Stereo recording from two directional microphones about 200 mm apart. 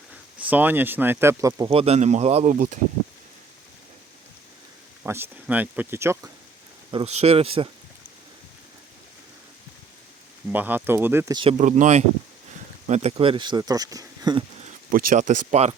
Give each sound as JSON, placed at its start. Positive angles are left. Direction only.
{"t": 0.1, "sound": "speech", "side_deg": -5}
{"t": 1.7, "sound": "speech", "side_deg": -30}
{"t": 5.0, "sound": "speech", "side_deg": -10}
{"t": 6.9, "sound": "speech", "side_deg": -30}
{"t": 10.5, "sound": "speech", "side_deg": -10}
{"t": 11.3, "sound": "speech", "side_deg": -30}
{"t": 14.6, "sound": "speech", "side_deg": -40}